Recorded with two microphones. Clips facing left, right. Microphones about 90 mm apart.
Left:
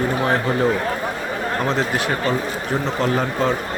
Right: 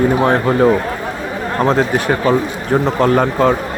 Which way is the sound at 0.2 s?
45° right (ahead or behind).